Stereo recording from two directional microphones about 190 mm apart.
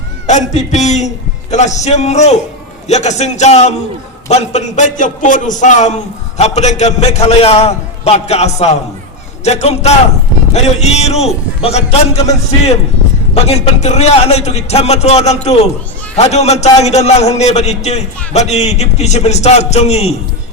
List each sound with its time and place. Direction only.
0.3 s a man's voice: 40° left (ahead or behind)
13.5 s a man's voice: 35° left (ahead or behind)